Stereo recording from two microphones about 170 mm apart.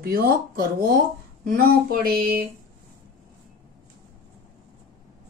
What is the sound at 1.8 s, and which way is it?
Speech, 60° right (ahead or behind).